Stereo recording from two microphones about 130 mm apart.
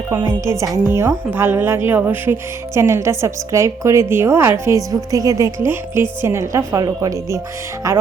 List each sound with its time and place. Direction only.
0.4 s speech: 25° right (ahead or behind)